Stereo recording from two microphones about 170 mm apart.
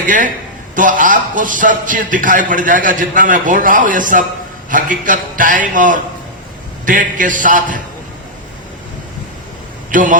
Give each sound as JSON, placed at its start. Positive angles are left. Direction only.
{"t": 0.0, "sound": "a man's voice", "side_deg": -50}
{"t": 9.9, "sound": "a man's voice", "side_deg": -50}